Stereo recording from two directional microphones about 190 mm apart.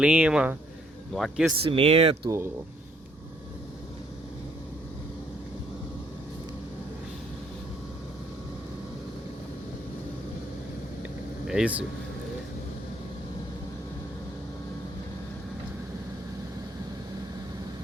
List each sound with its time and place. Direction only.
0.0 s speech: 5° right (ahead or behind)
1.6 s speech: 30° right (ahead or behind)
11.4 s speech: 5° right (ahead or behind)